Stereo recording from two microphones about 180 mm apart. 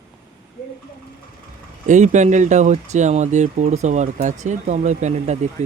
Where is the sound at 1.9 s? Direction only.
40° right (ahead or behind).